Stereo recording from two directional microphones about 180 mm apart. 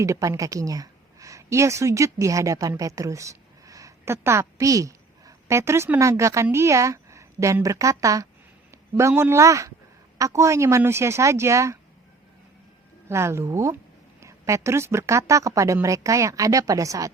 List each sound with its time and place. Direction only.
0.0 s a woman's voice: 15° right (ahead or behind)
13.1 s a woman's voice: 15° right (ahead or behind)